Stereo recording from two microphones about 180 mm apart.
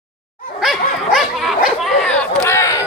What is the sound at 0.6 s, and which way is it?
Dog, centre (ahead or behind).